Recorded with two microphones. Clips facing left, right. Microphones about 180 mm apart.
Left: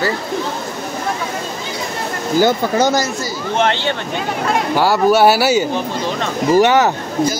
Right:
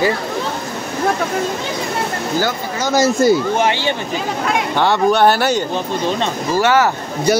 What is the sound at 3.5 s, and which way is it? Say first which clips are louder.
Speech: even; 10° right (ahead or behind).